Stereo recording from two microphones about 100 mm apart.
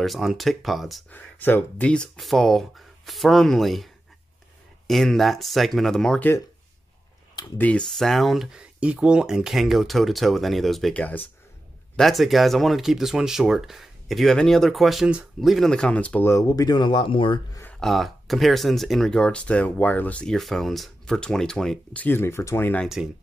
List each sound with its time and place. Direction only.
0.0 s speech: centre (ahead or behind)
1.1 s speech: 20° left (ahead or behind)
2.1 s speech: centre (ahead or behind)
7.5 s speech: 15° left (ahead or behind)
7.8 s speech: 5° left (ahead or behind)
11.0 s speech: 15° left (ahead or behind)
12.0 s speech: centre (ahead or behind)
16.3 s speech: 35° left (ahead or behind); by 17.4 s 55° left (ahead or behind)
17.7 s speech: centre (ahead or behind)
22.0 s speech: 25° left (ahead or behind)
23.0 s speech: 5° right (ahead or behind)